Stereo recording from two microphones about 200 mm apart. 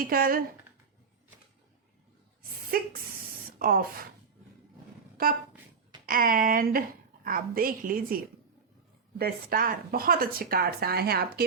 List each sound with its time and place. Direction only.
0.0 s speech: 45° right (ahead or behind)
2.6 s speech: 45° right (ahead or behind)
6.1 s speech: 45° right (ahead or behind)